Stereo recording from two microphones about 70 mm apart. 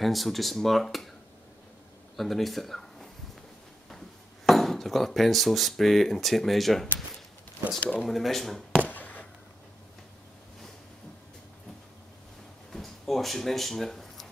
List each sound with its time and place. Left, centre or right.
0.0 s speech: centre
2.1 s speech: centre
4.5 s speech: centre
8.0 s speech: centre
8.7 s a sound: left
12.7 s a sound: centre